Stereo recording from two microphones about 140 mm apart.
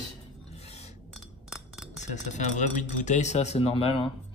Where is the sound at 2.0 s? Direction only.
60° left (ahead or behind).